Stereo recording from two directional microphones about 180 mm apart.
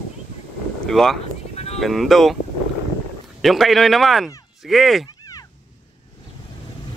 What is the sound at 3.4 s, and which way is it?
Speech, centre (ahead or behind).